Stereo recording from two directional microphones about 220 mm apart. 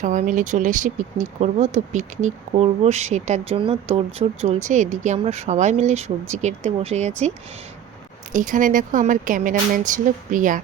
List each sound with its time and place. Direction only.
0.0 s speech: 35° right (ahead or behind)
8.3 s speech: 35° right (ahead or behind)